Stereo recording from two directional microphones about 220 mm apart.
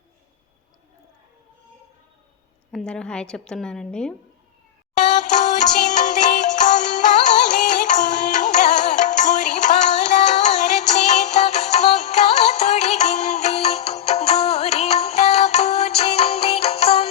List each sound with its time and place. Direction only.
2.7 s a woman's voice: 5° left (ahead or behind)
5.8 s music: 35° left (ahead or behind)